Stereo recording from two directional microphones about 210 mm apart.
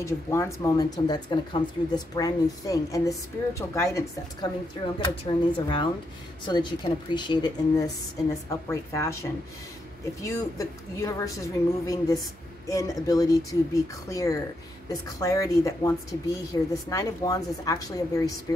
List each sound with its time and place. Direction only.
0.0 s a woman's voice: 15° left (ahead or behind)